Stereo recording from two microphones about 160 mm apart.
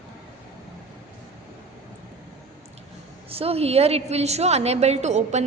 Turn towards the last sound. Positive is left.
turn(degrees=-45)  # may be behind; listen again after turning